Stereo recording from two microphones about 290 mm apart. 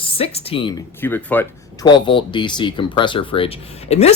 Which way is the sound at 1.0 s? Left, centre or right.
Centre.